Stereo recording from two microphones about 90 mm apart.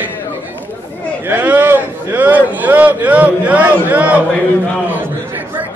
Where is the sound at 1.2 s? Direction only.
20° right (ahead or behind).